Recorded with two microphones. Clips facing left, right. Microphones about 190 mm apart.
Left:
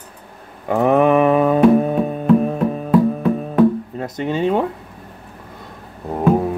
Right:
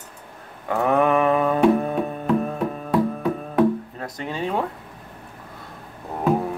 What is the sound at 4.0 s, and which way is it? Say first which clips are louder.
Speech: left 8 dB; 25° left (ahead or behind).